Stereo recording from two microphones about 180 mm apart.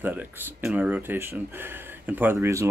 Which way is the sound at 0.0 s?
10° right (ahead or behind).